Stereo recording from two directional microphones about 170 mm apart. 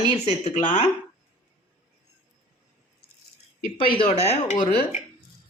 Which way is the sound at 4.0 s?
40° left (ahead or behind).